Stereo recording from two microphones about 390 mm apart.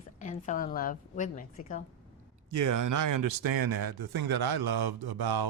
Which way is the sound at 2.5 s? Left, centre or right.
Right.